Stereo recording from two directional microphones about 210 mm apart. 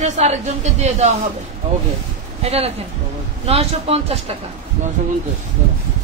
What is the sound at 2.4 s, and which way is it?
Speech, 30° right (ahead or behind).